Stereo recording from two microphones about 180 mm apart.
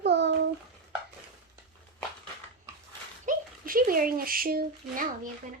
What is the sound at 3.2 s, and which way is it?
Speech, 50° right (ahead or behind).